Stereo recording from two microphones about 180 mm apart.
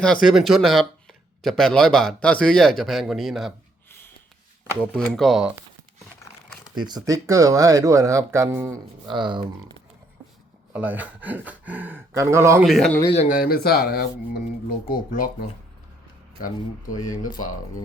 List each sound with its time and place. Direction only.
0.0 s speech: centre (ahead or behind)
4.7 s speech: 5° left (ahead or behind)
6.7 s speech: 25° right (ahead or behind)
9.0 s speech: 25° right (ahead or behind)
10.7 s speech: 10° right (ahead or behind)
12.6 s speech: centre (ahead or behind)
13.1 s speech: 50° left (ahead or behind)